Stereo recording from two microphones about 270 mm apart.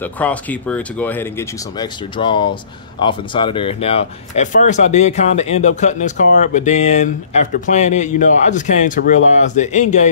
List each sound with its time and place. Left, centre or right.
0.0 s speech: centre; by 10.0 s left